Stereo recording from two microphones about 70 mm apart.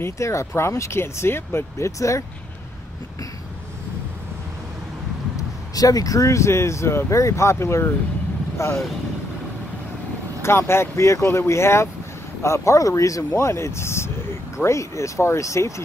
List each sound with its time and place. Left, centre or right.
0.0 s speech: left
1.9 s speech: left
5.8 s speech: left
10.4 s speech: left